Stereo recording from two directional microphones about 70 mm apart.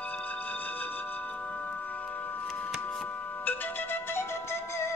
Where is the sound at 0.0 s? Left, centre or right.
Left.